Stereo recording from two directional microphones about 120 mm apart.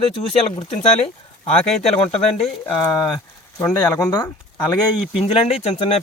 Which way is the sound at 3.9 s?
30° left (ahead or behind).